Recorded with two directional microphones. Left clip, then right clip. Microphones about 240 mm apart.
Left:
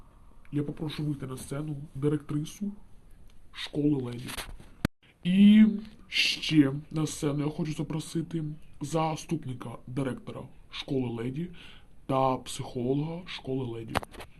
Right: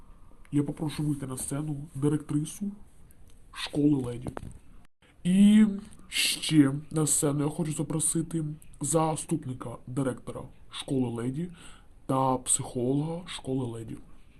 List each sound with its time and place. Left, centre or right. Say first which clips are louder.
0.5 s speech: right 3 dB; centre
5.2 s speech: left 1 dB; centre